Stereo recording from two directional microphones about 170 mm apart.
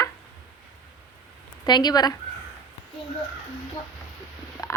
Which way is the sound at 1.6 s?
25° left (ahead or behind).